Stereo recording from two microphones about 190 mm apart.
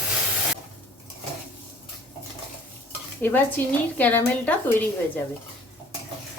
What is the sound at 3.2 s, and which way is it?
A woman's voice, 10° left (ahead or behind).